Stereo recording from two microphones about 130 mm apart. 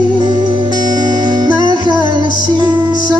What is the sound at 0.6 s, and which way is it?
Music, 30° right (ahead or behind).